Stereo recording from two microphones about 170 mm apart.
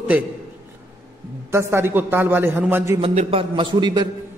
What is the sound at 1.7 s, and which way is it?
A man's voice, 15° right (ahead or behind).